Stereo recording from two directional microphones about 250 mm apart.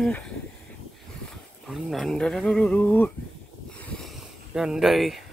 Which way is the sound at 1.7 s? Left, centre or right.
Centre.